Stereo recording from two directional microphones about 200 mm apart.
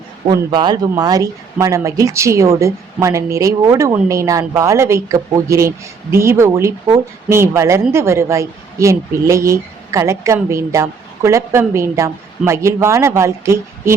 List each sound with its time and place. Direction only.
0.3 s a woman's voice: 20° right (ahead or behind)